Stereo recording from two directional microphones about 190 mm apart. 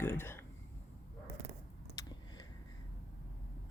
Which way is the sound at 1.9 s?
20° left (ahead or behind).